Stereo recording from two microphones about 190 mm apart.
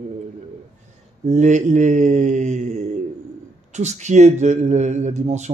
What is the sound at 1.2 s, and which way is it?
Speech, 40° right (ahead or behind).